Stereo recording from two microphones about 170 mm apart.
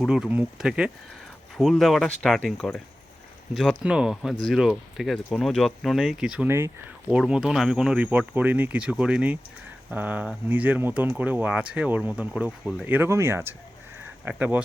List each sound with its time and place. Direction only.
0.0 s speech: 5° right (ahead or behind)